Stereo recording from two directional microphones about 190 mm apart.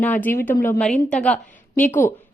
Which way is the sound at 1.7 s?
40° left (ahead or behind).